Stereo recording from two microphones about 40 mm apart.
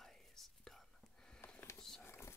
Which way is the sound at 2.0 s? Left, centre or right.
Left.